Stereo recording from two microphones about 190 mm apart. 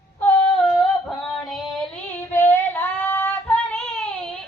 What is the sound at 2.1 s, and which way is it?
Female singing, 10° left (ahead or behind).